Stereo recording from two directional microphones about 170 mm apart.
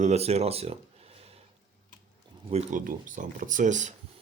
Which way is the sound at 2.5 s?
40° right (ahead or behind).